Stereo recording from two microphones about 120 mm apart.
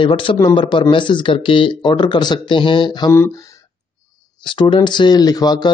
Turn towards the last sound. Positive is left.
turn(degrees=35)  # may be behind; listen again after turning